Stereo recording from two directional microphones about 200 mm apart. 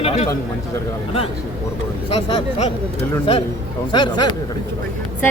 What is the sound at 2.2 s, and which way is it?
Speech, 25° left (ahead or behind).